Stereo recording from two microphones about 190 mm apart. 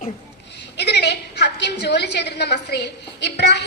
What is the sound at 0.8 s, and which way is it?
A woman's voice, 60° left (ahead or behind).